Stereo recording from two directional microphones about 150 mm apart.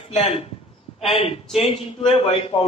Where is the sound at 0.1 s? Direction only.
40° left (ahead or behind).